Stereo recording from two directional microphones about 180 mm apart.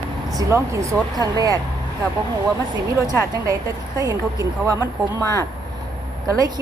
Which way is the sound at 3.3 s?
20° right (ahead or behind).